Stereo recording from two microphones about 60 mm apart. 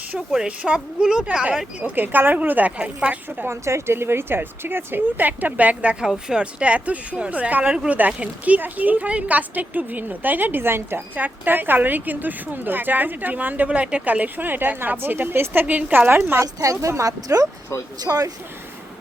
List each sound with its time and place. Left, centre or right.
0.3 s a woman's voice: centre
1.8 s speech: right
3.2 s speech: right
16.4 s a woman's voice: right
18.0 s speech: right